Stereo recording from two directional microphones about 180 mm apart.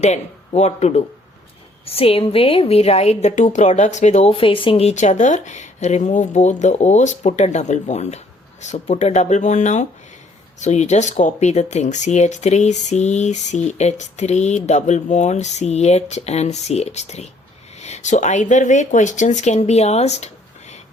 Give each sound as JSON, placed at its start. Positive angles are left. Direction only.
{"t": 0.0, "sound": "speech", "side_deg": 40}